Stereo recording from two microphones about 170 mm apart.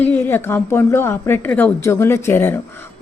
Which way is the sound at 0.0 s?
10° left (ahead or behind).